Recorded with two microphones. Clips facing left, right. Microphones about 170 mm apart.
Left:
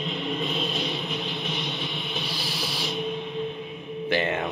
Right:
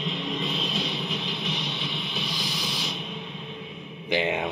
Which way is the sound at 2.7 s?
35° left (ahead or behind).